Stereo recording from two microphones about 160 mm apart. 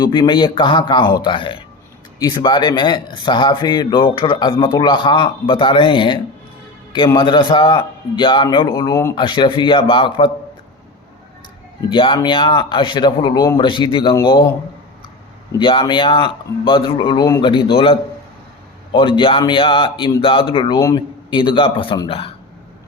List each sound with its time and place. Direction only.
0.0 s a man's voice: 30° left (ahead or behind)
11.9 s a man's voice: 30° left (ahead or behind)
15.5 s a man's voice: 30° left (ahead or behind)
18.9 s a man's voice: 30° left (ahead or behind)